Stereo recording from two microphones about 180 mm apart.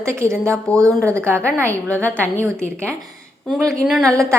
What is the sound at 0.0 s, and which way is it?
Speech, 15° right (ahead or behind).